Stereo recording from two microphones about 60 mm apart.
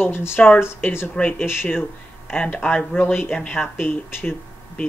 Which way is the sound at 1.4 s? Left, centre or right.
Left.